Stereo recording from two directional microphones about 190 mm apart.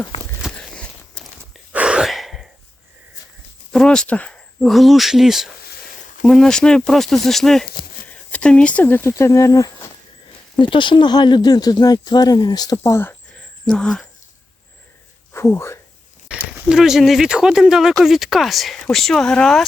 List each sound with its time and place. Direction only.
0.4 s a sound: centre (ahead or behind)
1.7 s gasp: 5° right (ahead or behind)
3.7 s speech: 5° left (ahead or behind)
15.3 s speech: 15° left (ahead or behind)
16.3 s speech: 5° right (ahead or behind)